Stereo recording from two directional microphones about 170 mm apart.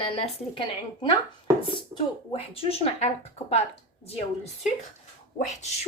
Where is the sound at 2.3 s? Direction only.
35° left (ahead or behind).